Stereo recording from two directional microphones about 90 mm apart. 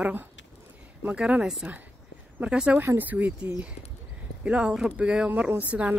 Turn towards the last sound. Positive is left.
turn(degrees=-15)  # may be behind; listen again after turning